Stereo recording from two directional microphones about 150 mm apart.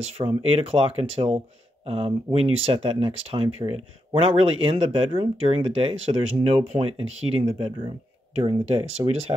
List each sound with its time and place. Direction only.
0.2 s speech: 40° right (ahead or behind)